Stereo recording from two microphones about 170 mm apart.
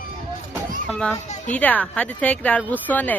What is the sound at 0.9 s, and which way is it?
A child's voice, 5° left (ahead or behind).